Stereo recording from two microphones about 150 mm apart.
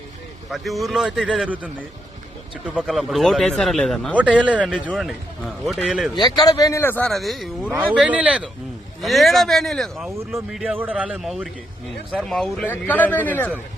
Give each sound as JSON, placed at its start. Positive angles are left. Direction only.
{"t": 0.5, "sound": "speech", "side_deg": 0}
{"t": 2.6, "sound": "speech", "side_deg": -5}
{"t": 4.1, "sound": "speech", "side_deg": -10}
{"t": 6.1, "sound": "a man's voice", "side_deg": 25}